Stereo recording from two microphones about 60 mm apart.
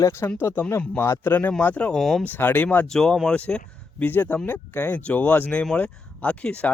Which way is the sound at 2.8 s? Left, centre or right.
Centre.